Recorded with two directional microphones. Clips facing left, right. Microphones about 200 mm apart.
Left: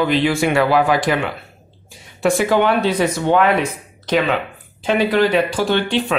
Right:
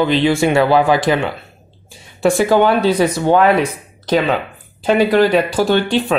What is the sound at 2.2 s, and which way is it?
Speech, 35° right (ahead or behind).